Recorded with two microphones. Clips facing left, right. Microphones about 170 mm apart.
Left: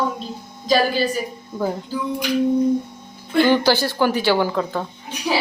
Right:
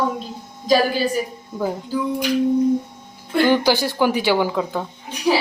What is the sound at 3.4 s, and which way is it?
A woman's voice, 15° right (ahead or behind).